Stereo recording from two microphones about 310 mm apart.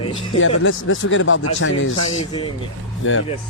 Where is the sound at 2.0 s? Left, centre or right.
Left.